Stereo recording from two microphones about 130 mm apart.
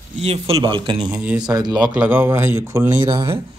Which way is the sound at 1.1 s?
10° right (ahead or behind).